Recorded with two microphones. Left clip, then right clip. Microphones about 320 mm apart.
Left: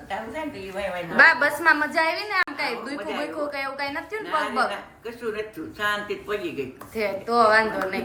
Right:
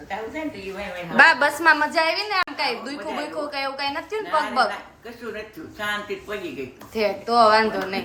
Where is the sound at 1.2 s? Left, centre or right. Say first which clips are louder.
Right 1 dB; centre.